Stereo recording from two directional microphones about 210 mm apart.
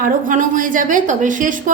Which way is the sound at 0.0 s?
40° right (ahead or behind).